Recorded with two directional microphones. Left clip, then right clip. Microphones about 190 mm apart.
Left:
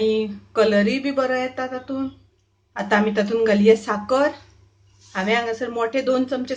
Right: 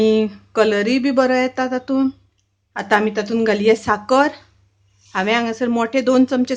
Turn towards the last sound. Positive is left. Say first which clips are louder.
# right 5 dB
turn(degrees=-40)  # may be behind; listen again after turning